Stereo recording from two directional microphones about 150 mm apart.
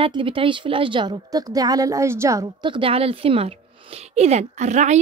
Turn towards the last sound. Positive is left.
turn(degrees=-50)  # may be behind; listen again after turning